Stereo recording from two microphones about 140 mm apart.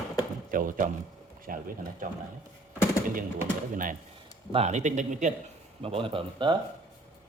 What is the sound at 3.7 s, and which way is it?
Speech, 70° right (ahead or behind).